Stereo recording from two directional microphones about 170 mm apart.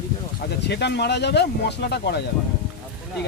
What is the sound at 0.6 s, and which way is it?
Speech, 80° left.